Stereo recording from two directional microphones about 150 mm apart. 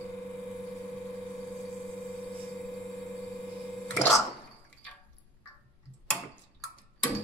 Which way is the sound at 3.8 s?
5° left (ahead or behind).